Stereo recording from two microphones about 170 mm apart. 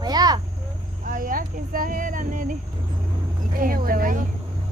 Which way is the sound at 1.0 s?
55° right (ahead or behind).